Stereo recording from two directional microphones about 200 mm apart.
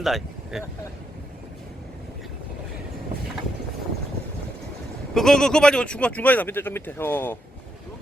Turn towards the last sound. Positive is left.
turn(degrees=10)  # may be behind; listen again after turning